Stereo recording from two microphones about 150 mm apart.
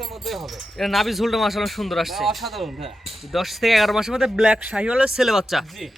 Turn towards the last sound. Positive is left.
turn(degrees=0)  # may be behind; listen again after turning